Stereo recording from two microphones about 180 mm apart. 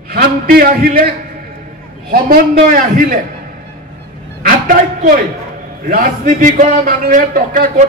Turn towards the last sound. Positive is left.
turn(degrees=-50)  # may be behind; listen again after turning